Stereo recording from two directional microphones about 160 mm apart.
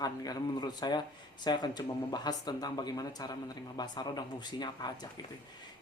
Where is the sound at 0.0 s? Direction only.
25° left (ahead or behind).